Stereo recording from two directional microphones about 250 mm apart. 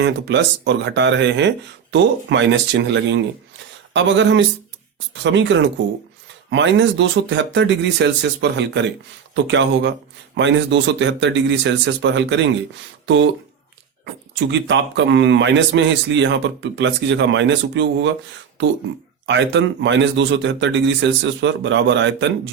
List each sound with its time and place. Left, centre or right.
0.0 s speech: right
14.0 s speech: right
19.2 s speech: right